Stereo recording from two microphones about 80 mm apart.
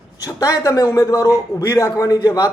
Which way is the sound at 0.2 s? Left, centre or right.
Left.